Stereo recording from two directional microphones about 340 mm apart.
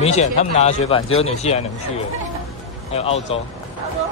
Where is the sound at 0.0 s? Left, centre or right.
Centre.